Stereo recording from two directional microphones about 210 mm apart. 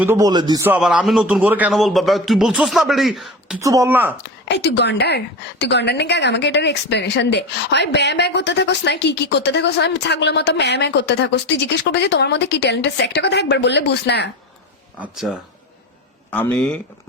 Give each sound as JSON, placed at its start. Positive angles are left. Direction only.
{"t": 0.0, "sound": "a man's voice", "side_deg": -15}
{"t": 3.6, "sound": "speech", "side_deg": -15}
{"t": 4.2, "sound": "a woman's voice", "side_deg": 55}
{"t": 15.0, "sound": "a man's voice", "side_deg": 0}
{"t": 16.3, "sound": "speech", "side_deg": 5}